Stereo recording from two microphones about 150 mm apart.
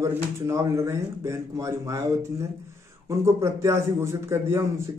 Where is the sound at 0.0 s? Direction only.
20° right (ahead or behind).